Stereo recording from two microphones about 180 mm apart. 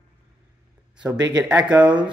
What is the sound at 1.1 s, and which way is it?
Speech, 20° right (ahead or behind).